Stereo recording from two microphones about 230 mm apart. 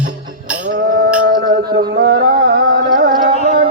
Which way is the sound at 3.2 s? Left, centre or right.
Right.